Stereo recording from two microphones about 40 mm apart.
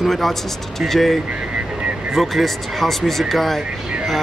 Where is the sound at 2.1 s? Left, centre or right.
Centre.